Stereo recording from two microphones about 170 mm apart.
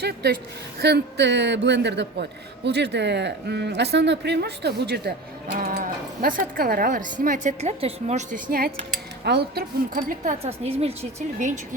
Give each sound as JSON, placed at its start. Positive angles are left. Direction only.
{"t": 0.0, "sound": "a woman's voice", "side_deg": -70}
{"t": 6.2, "sound": "a woman's voice", "side_deg": -55}
{"t": 9.2, "sound": "speech", "side_deg": -75}
{"t": 9.6, "sound": "speech", "side_deg": -55}
{"t": 10.4, "sound": "a woman's voice", "side_deg": -40}